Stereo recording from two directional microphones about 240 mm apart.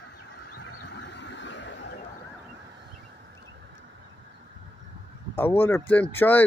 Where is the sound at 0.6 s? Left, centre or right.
Left.